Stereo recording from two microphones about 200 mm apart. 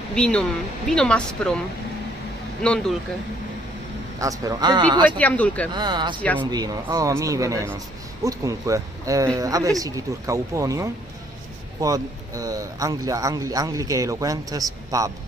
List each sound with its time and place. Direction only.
0.1 s speech: 5° left (ahead or behind)
2.6 s speech: 5° left (ahead or behind)
4.2 s speech: 20° right (ahead or behind)
5.0 s speech: 5° left (ahead or behind)
5.7 s speech: 20° right (ahead or behind)